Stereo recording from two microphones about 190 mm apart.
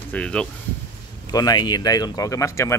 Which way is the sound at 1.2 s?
20° left (ahead or behind).